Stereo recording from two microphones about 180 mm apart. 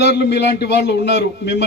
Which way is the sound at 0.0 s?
70° left (ahead or behind).